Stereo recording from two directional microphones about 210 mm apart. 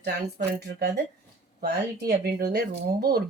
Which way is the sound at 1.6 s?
50° right (ahead or behind).